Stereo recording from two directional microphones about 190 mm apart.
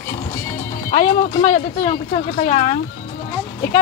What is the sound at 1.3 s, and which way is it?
Speech, 30° left (ahead or behind).